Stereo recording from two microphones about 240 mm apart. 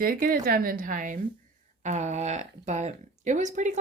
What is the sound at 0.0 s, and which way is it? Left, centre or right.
Speech, right.